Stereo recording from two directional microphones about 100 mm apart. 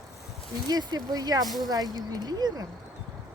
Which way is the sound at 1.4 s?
Centre (ahead or behind).